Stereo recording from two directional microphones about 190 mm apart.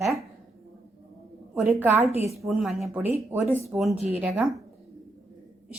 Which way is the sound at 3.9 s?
30° left (ahead or behind).